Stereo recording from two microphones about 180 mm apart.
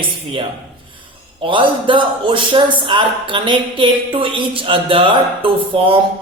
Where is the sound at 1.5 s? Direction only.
30° right (ahead or behind).